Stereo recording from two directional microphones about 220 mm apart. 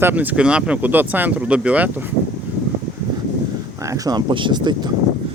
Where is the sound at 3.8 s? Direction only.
15° right (ahead or behind).